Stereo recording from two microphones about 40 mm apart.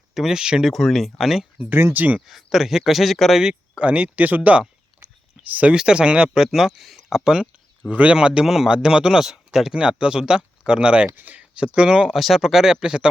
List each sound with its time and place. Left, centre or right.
0.1 s speech: centre
0.3 s speech: centre
0.7 s speech: centre
1.9 s speech: right
2.2 s speech: centre
3.8 s speech: right
4.3 s speech: right
5.0 s a sound: right
5.7 s speech: right; by 7.3 s centre
7.9 s a man's voice: right
8.3 s speech: centre
11.1 s speech: right
11.3 s speech: right
11.9 s speech: centre